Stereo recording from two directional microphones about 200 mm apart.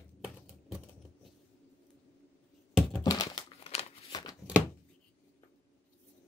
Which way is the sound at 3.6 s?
30° left (ahead or behind).